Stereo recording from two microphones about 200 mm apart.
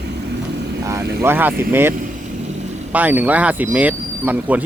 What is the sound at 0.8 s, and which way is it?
Speech, 15° right (ahead or behind).